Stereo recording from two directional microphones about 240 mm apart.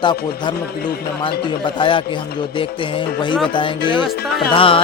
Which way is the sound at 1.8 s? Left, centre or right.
Left.